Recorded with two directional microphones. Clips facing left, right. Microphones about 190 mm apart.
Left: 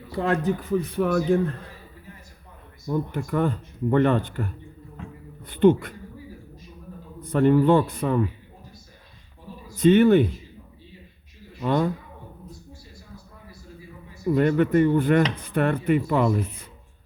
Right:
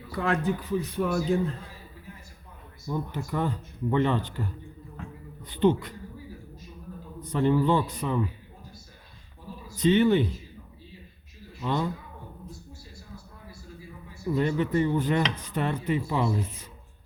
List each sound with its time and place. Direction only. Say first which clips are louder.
0.1 s speech: left 3 dB; 35° left (ahead or behind)
0.6 s dishes: left 4 dB; 55° left (ahead or behind)
2.9 s dishes: left 5 dB; 55° left (ahead or behind)
7.2 s dishes: left 5 dB; 55° left (ahead or behind)
9.7 s speech: left 5 dB; 50° left (ahead or behind)
11.6 s speech: left 6 dB; 50° left (ahead or behind)
14.3 s dishes: left 6 dB; 60° left (ahead or behind)